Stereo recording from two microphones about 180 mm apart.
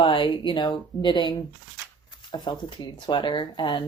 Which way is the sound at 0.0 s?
30° left (ahead or behind).